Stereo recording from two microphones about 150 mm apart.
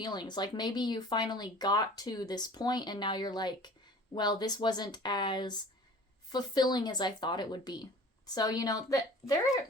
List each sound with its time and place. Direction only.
0.0 s speech: 30° left (ahead or behind)